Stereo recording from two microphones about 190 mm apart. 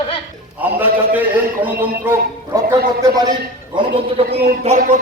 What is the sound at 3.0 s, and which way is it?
Speech, 20° right (ahead or behind).